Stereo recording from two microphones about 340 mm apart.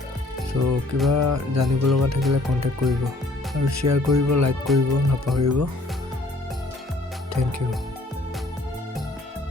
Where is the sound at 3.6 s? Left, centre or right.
Right.